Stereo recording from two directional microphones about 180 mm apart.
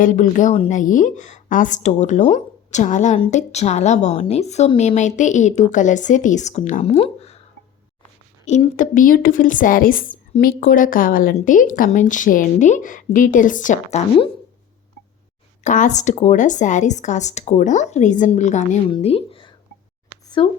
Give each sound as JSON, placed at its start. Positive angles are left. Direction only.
{"t": 0.0, "sound": "a woman's voice", "side_deg": 45}
{"t": 8.4, "sound": "speech", "side_deg": 45}
{"t": 15.6, "sound": "a woman's voice", "side_deg": 45}
{"t": 18.9, "sound": "speech", "side_deg": 30}